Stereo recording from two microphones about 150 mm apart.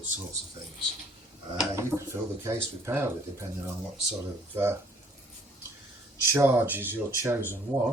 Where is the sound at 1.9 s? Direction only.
5° left (ahead or behind).